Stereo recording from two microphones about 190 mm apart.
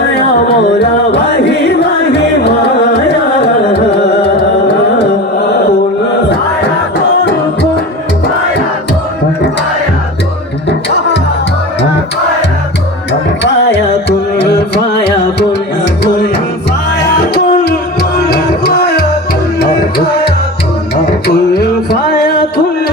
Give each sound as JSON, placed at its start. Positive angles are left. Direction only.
{"t": 0.4, "sound": "music", "side_deg": 60}
{"t": 3.7, "sound": "carnatic music", "side_deg": 60}
{"t": 10.7, "sound": "music", "side_deg": 65}
{"t": 13.4, "sound": "music", "side_deg": 65}
{"t": 21.2, "sound": "a sound", "side_deg": 55}